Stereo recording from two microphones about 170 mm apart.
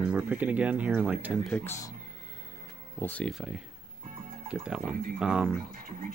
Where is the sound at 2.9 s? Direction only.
10° left (ahead or behind).